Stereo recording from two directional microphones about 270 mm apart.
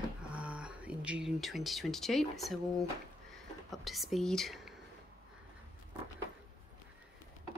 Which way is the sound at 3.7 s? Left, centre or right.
Centre.